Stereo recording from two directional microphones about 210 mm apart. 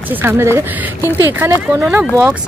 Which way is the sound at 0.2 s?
10° right (ahead or behind).